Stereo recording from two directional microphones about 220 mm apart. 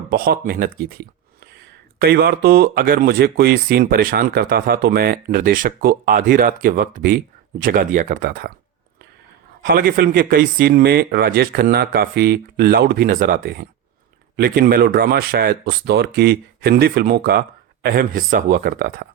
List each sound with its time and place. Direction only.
0.1 s speech: 45° right (ahead or behind)
9.6 s speech: 40° right (ahead or behind)